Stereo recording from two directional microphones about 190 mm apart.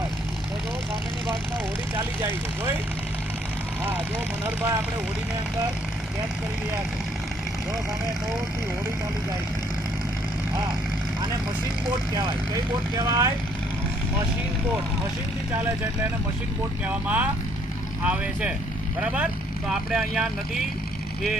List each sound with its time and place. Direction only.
4.4 s speech: 10° right (ahead or behind)
13.0 s speech: 20° right (ahead or behind)
16.8 s speech: 10° right (ahead or behind)